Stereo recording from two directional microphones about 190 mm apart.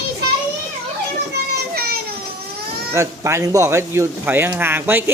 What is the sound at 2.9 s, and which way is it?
Speech, 15° right (ahead or behind).